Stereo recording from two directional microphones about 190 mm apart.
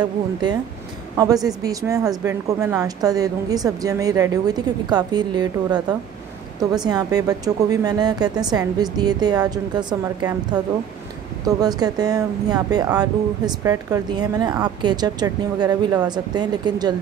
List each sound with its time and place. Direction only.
0.0 s speech: 20° right (ahead or behind)